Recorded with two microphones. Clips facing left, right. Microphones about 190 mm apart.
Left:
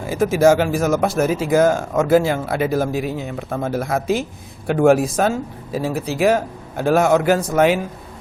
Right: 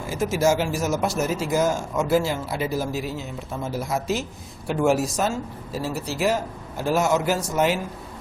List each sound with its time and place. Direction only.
0.1 s speech: 55° left (ahead or behind)